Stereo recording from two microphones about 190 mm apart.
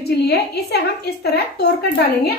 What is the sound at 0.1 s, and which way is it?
A woman's voice, 60° left (ahead or behind).